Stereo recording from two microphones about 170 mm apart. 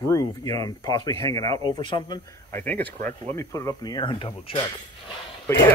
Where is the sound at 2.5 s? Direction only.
10° left (ahead or behind).